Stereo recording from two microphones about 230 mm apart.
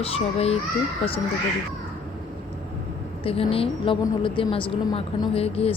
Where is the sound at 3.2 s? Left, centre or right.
Left.